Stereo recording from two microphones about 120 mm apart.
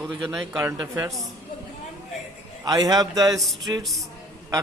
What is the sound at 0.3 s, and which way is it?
Speech, 25° right (ahead or behind).